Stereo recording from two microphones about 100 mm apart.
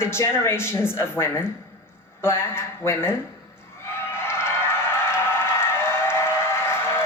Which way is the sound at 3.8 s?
25° left (ahead or behind).